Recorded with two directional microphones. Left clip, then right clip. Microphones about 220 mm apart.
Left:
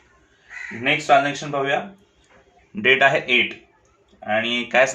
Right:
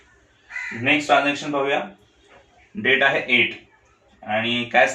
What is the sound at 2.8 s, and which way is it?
Speech, 35° left (ahead or behind).